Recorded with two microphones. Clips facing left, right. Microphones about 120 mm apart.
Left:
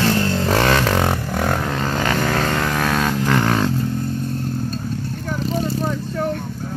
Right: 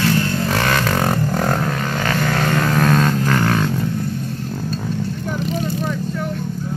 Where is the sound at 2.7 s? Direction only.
5° left (ahead or behind).